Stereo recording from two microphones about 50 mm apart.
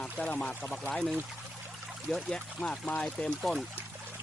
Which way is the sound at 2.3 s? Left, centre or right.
Centre.